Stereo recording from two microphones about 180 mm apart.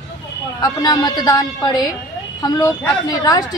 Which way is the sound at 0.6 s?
25° left (ahead or behind).